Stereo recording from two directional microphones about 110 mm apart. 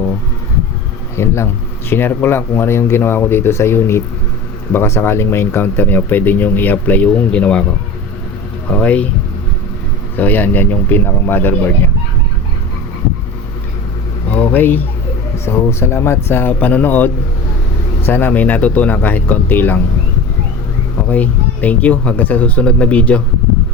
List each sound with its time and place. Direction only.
1.1 s speech: 25° left (ahead or behind)
8.7 s speech: 15° left (ahead or behind)
10.2 s speech: 15° left (ahead or behind)
14.3 s a sound: 15° left (ahead or behind)
15.4 s speech: 25° left (ahead or behind)
21.1 s speech: 15° left (ahead or behind)